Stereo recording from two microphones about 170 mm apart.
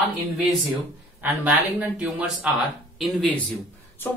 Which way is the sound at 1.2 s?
10° right (ahead or behind).